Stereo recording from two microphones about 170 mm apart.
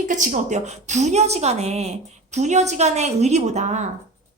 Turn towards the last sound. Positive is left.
turn(degrees=-45)  # may be behind; listen again after turning